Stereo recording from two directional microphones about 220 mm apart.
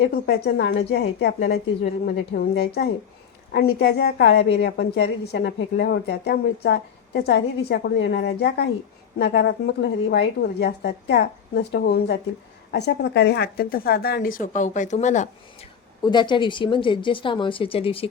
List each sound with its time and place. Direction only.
0.0 s a woman's voice: 50° left (ahead or behind)
16.0 s a woman's voice: 20° left (ahead or behind)